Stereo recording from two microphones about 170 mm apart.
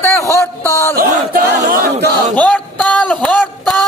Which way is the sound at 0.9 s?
60° right (ahead or behind).